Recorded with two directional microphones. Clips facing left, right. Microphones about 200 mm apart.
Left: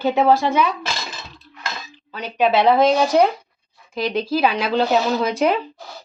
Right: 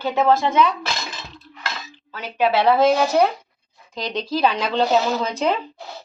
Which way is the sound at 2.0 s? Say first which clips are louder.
Left 2 dB; 15° left (ahead or behind).